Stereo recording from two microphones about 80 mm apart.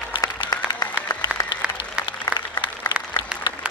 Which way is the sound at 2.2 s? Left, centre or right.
Left.